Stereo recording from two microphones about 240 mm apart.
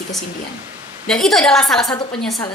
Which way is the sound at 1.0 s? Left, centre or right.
Centre.